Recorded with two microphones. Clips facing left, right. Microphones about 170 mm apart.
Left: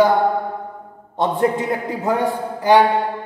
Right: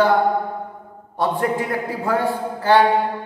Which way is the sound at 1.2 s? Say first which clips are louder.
Left 2 dB; 20° left (ahead or behind).